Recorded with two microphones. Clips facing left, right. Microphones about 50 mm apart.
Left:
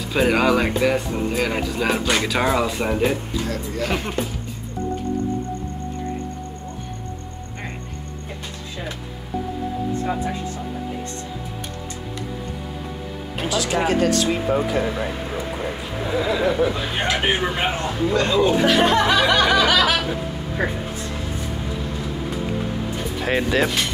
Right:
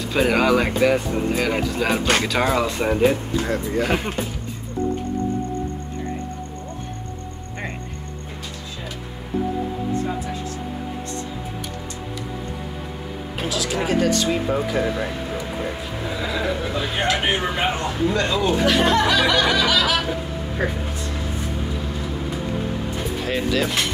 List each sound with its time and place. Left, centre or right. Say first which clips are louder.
0.1 s speech: even; centre
3.3 s speech: right 4 dB; right
3.8 s speech: left 1 dB; centre
13.4 s speech: left 3 dB; centre
16.1 s speech: left 5 dB; centre
17.6 s a sound: even; centre
18.2 s music: left 4 dB; centre
19.6 s snicker: left 2 dB; left
20.1 s a sound: even; centre
23.2 s speech: left 3 dB; left